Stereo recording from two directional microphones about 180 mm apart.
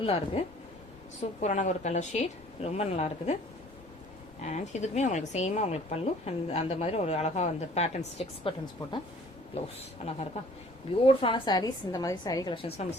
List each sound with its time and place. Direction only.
0.0 s speech: 30° left (ahead or behind)
4.4 s speech: 40° left (ahead or behind)
11.0 s a woman's voice: 30° left (ahead or behind)
12.6 s speech: 35° left (ahead or behind)